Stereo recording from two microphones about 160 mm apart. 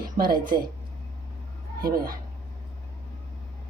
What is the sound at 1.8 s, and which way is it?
Speech, 65° right (ahead or behind).